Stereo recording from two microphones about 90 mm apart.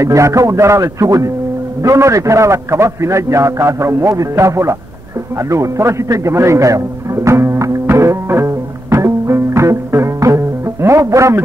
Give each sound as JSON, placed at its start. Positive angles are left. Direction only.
{"t": 0.0, "sound": "a man's voice", "side_deg": -35}
{"t": 5.4, "sound": "music", "side_deg": -35}